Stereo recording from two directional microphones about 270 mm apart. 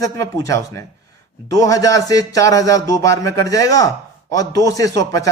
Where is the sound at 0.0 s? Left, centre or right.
Centre.